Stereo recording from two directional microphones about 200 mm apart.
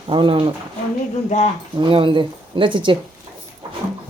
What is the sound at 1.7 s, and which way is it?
Speech, 25° right (ahead or behind).